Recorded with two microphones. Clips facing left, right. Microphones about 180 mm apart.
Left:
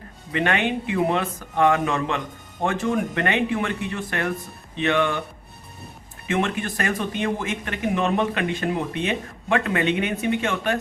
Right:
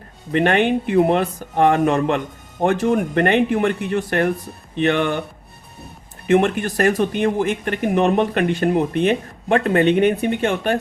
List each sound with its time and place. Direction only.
0.3 s speech: 45° right (ahead or behind)
6.4 s speech: 40° right (ahead or behind)
7.3 s speech: 55° right (ahead or behind)
9.5 s speech: 40° right (ahead or behind)